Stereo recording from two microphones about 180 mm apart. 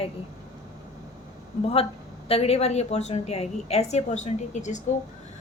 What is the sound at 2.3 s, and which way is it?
A woman's voice, 35° left (ahead or behind).